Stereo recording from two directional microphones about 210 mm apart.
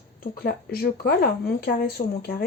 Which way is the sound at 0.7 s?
45° left (ahead or behind).